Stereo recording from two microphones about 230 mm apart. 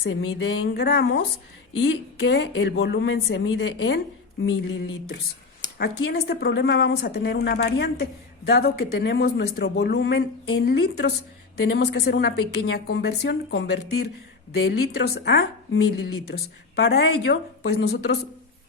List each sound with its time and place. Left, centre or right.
0.0 s speech: left
4.4 s a sound: left
5.7 s speech: left